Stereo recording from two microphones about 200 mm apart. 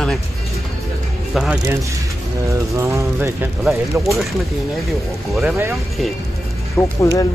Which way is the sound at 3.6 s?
Centre (ahead or behind).